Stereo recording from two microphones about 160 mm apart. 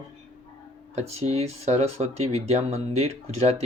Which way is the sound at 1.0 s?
40° right (ahead or behind).